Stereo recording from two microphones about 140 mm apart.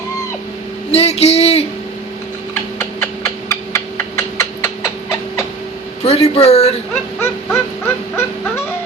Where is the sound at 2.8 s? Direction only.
20° left (ahead or behind).